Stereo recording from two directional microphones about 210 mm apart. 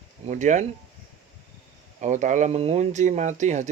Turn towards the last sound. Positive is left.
turn(degrees=-35)  # may be behind; listen again after turning